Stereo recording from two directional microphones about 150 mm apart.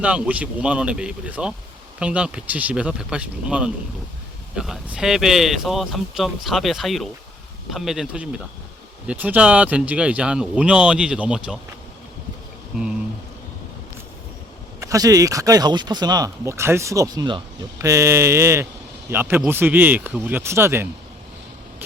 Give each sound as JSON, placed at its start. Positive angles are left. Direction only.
{"t": 0.0, "sound": "speech", "side_deg": -10}
{"t": 14.8, "sound": "speech", "side_deg": -25}